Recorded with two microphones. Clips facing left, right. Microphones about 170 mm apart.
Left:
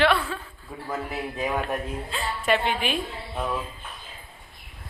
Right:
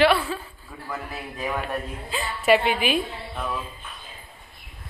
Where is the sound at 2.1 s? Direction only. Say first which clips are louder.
Right 5 dB; 5° right (ahead or behind).